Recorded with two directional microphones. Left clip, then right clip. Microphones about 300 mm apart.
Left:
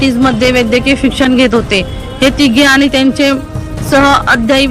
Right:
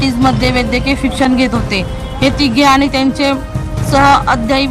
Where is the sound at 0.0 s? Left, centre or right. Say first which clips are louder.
Left 3 dB; centre.